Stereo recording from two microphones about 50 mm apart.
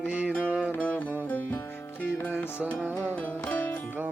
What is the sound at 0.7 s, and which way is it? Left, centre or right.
Music, left.